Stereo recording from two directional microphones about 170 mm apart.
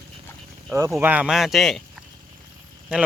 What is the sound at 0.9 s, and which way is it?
Speech, 10° right (ahead or behind).